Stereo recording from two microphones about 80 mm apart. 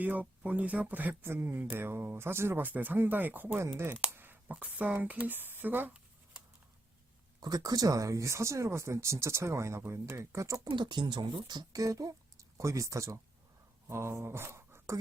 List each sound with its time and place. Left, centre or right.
0.0 s speech: centre
7.3 s speech: right
10.6 s speech: right